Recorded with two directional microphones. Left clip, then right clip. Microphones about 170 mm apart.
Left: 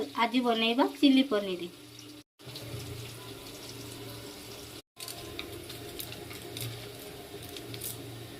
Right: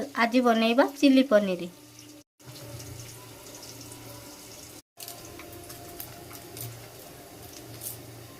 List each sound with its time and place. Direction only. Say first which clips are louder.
0.2 s a woman's voice: right 5 dB; 40° right (ahead or behind)